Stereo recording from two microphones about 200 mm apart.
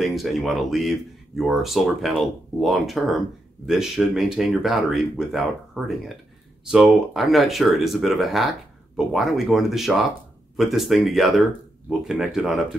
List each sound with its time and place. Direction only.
0.0 s speech: centre (ahead or behind)
6.6 s speech: 5° right (ahead or behind)